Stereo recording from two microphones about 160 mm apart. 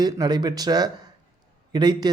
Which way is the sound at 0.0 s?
25° right (ahead or behind).